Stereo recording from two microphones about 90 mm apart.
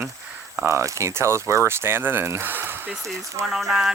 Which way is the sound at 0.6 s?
30° right (ahead or behind).